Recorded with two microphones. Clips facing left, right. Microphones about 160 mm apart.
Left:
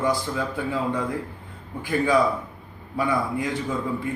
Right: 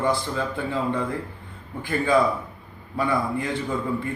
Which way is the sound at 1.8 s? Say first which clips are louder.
Even; 10° left (ahead or behind).